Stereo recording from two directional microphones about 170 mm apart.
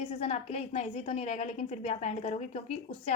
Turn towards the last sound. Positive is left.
turn(degrees=40)  # may be behind; listen again after turning